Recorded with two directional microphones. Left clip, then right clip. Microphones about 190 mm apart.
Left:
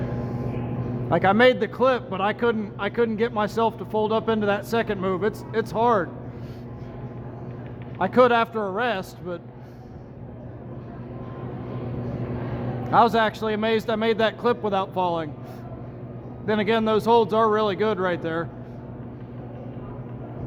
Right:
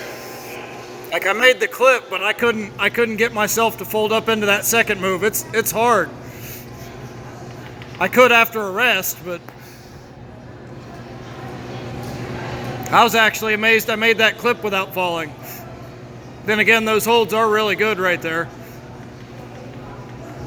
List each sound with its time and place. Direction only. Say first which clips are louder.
1.1 s a man's voice: right 3 dB; 15° right (ahead or behind)
7.9 s a man's voice: right 6 dB; 15° right (ahead or behind)
12.9 s a man's voice: right 5 dB; 10° right (ahead or behind)
16.5 s a man's voice: right 7 dB; 10° right (ahead or behind)